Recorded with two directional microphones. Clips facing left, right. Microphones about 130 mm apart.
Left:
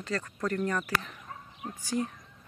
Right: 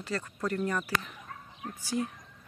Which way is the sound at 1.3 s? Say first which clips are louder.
Left 1 dB; 25° left (ahead or behind).